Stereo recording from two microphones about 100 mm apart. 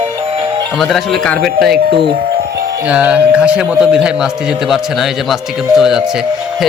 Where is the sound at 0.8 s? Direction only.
Centre (ahead or behind).